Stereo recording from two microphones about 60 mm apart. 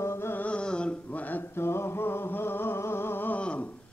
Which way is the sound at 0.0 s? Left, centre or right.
Left.